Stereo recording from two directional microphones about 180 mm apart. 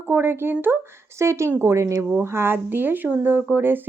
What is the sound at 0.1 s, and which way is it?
A woman's voice, 10° right (ahead or behind).